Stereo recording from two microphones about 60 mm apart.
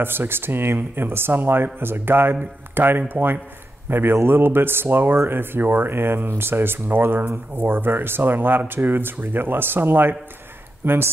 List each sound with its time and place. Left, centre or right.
0.0 s speech: right